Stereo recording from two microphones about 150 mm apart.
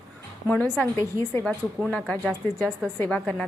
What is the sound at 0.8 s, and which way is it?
A woman's voice, 15° left (ahead or behind).